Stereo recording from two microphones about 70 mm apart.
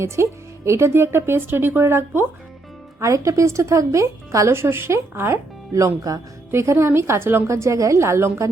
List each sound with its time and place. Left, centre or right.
0.0 s a woman's voice: right
6.5 s speech: right